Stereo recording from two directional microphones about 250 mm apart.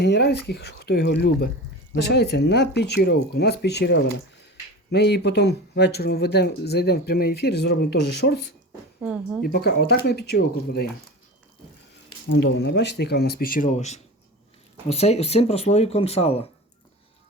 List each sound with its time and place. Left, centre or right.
0.0 s speech: left
9.0 s a woman's voice: centre
9.4 s speech: left
12.3 s speech: left